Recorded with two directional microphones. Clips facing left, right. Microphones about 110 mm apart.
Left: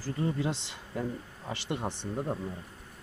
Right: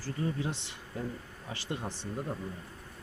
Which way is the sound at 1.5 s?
75° left (ahead or behind).